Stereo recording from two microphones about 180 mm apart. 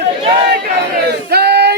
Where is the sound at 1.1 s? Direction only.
65° right (ahead or behind).